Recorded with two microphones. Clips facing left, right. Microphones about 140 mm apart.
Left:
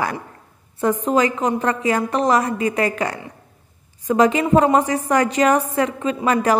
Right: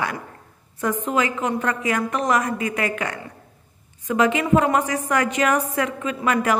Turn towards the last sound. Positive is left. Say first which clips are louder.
# left 3 dB
turn(degrees=35)  # may be behind; listen again after turning